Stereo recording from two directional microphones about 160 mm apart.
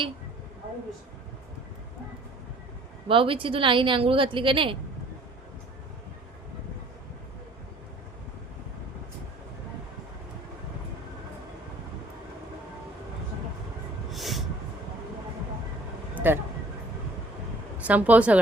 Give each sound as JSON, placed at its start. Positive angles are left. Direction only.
{"t": 3.1, "sound": "a woman's voice", "side_deg": -35}
{"t": 14.1, "sound": "train", "side_deg": 0}
{"t": 16.1, "sound": "vehicle", "side_deg": -15}
{"t": 17.8, "sound": "speech", "side_deg": -10}